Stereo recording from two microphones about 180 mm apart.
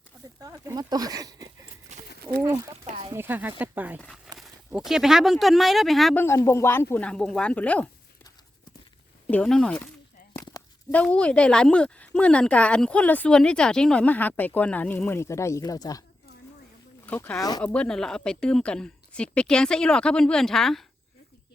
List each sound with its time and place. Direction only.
0.4 s speech: 20° right (ahead or behind)
1.9 s a sound: 40° right (ahead or behind)
2.4 s speech: 20° right (ahead or behind)
2.8 s a sound: 30° right (ahead or behind)
3.1 s speech: 10° right (ahead or behind)
6.2 s speech: 15° left (ahead or behind)
9.2 s speech: 5° left (ahead or behind)
10.3 s a sound: 20° left (ahead or behind)
10.9 s speech: 5° left (ahead or behind)
17.1 s speech: 10° left (ahead or behind)
17.6 s speech: 5° left (ahead or behind)